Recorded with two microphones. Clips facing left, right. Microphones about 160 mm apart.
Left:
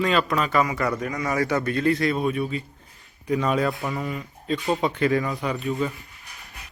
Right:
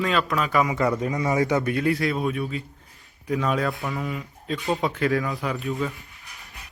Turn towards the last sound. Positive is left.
turn(degrees=0)  # may be behind; listen again after turning